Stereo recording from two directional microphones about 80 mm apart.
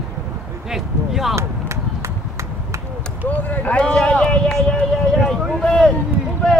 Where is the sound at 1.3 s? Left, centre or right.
Right.